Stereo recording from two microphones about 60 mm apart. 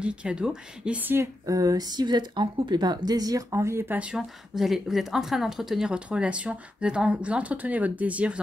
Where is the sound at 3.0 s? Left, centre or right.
Right.